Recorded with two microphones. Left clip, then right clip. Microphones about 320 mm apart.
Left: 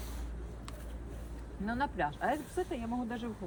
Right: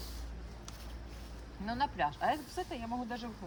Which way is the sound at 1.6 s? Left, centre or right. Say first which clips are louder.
Right 1 dB; centre.